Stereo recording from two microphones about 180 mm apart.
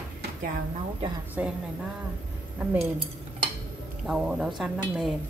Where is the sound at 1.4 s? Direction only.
10° right (ahead or behind).